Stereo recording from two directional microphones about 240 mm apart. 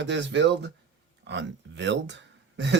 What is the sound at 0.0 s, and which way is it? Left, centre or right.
Speech, right.